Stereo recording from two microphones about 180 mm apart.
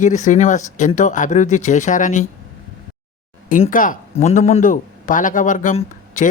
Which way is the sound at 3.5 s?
45° left (ahead or behind).